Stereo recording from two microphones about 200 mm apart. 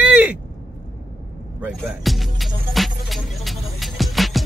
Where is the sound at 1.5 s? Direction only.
5° right (ahead or behind).